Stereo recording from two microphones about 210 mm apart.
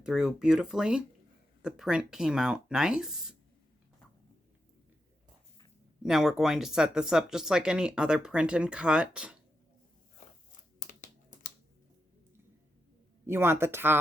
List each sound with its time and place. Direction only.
0.0 s speech: 5° right (ahead or behind)
6.0 s speech: centre (ahead or behind)
10.8 s a sound: 35° left (ahead or behind)
13.2 s speech: 10° right (ahead or behind)